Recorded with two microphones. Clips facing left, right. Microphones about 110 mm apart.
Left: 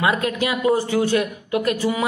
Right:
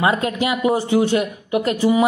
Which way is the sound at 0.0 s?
25° right (ahead or behind).